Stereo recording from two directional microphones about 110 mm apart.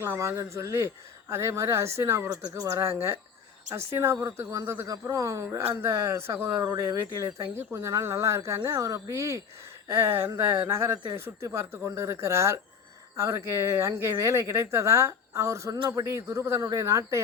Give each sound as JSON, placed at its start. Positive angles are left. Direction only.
{"t": 0.0, "sound": "speech", "side_deg": -25}